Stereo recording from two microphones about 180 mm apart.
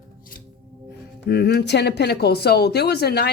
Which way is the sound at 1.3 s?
60° left (ahead or behind).